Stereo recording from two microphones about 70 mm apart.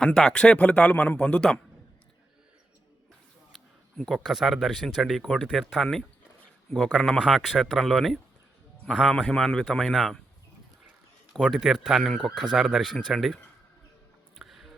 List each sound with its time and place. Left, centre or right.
0.0 s a man's voice: centre
3.5 s a man's voice: centre
9.1 s a man's voice: centre
11.6 s speech: centre
14.3 s music: centre